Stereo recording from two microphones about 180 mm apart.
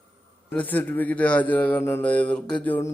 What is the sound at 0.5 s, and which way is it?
A man's voice, 10° left (ahead or behind).